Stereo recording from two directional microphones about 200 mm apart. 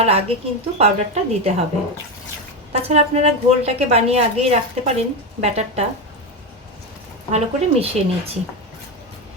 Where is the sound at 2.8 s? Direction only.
30° right (ahead or behind).